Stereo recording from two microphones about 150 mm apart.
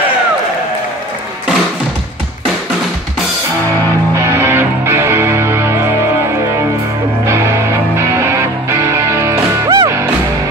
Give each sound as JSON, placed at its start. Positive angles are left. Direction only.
{"t": 4.1, "sound": "music", "side_deg": -20}
{"t": 7.2, "sound": "music", "side_deg": -20}